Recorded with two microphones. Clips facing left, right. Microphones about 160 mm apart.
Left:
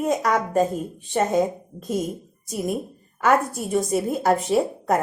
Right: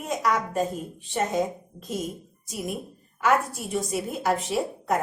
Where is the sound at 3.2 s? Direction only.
45° left (ahead or behind).